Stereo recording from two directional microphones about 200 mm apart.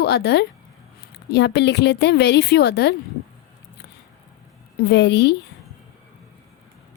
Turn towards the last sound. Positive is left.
turn(degrees=55)  # may be behind; listen again after turning